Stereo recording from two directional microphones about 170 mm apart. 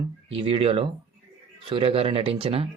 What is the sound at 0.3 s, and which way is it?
Speech, 35° right (ahead or behind).